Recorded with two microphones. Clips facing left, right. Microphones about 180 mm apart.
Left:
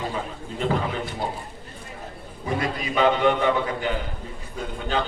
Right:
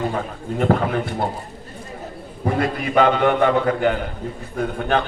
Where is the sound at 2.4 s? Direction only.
60° right (ahead or behind).